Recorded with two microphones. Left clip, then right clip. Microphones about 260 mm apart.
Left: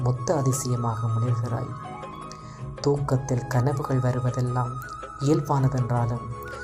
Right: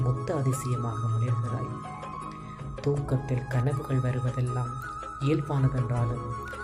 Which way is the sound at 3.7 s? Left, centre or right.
Centre.